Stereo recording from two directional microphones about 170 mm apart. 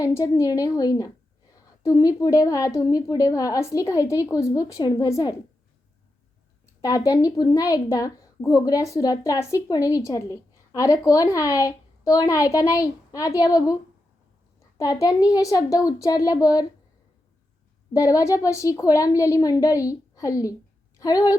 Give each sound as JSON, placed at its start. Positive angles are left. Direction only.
{"t": 0.0, "sound": "a woman's voice", "side_deg": 15}
{"t": 6.8, "sound": "a woman's voice", "side_deg": 20}
{"t": 17.9, "sound": "a woman's voice", "side_deg": 20}